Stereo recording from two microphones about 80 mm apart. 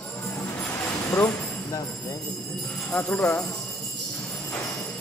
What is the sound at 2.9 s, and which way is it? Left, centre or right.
Speech, left.